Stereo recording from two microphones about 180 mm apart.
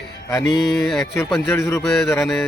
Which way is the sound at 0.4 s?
Centre (ahead or behind).